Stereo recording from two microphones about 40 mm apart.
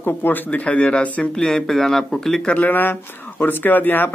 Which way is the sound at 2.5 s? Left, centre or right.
Left.